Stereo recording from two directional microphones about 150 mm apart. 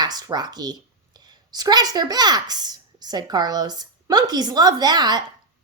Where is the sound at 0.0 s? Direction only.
25° right (ahead or behind).